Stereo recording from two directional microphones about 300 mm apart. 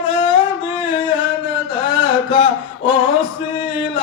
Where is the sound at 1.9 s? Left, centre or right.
Centre.